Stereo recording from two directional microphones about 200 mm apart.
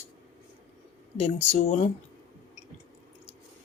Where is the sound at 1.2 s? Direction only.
30° left (ahead or behind).